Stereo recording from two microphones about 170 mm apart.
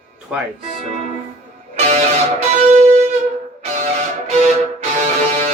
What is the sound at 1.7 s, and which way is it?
Music, 45° right (ahead or behind).